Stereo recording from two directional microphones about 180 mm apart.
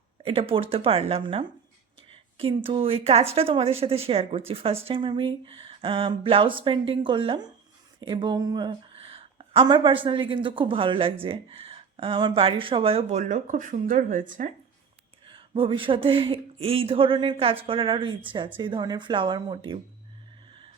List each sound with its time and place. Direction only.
0.2 s speech: 30° right (ahead or behind); by 14.5 s 45° right (ahead or behind)
15.3 s speech: 30° right (ahead or behind)